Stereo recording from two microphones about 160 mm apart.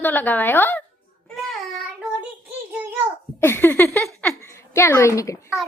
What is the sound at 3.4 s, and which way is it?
A woman's voice, 15° left (ahead or behind).